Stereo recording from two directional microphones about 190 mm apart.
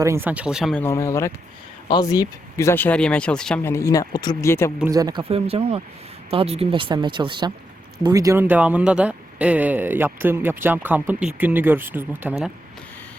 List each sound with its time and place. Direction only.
0.0 s speech: 15° right (ahead or behind); by 4.7 s 15° left (ahead or behind)
4.9 s speech: 20° right (ahead or behind)
5.3 s speech: 30° right (ahead or behind); by 12.4 s 10° right (ahead or behind)